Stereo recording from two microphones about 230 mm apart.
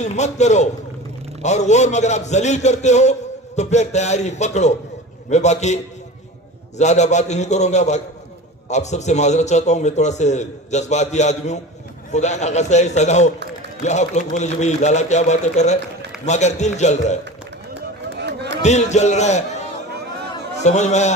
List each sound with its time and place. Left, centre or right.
0.0 s a man's voice: left
6.8 s a man's voice: left
18.2 s chatter: right
18.6 s a man's voice: left
20.5 s a man's voice: left